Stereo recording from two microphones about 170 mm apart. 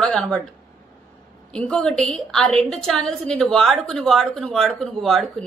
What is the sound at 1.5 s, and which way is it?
A woman's voice, 5° left (ahead or behind).